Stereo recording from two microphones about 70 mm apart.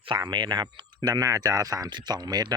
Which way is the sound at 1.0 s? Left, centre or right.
Right.